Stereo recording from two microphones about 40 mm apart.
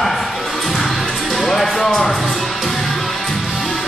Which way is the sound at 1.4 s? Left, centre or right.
Centre.